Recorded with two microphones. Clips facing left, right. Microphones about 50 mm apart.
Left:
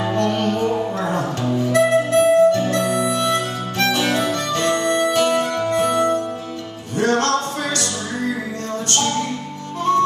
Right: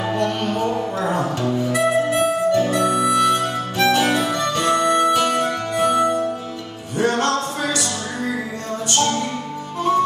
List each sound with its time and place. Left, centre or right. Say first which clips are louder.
0.1 s music: left 2 dB; centre
1.7 s harmonica: left 4 dB; centre
5.1 s harpsichord: left 1 dB; centre
7.0 s music: left 1 dB; centre
9.9 s harmonica: left 1 dB; centre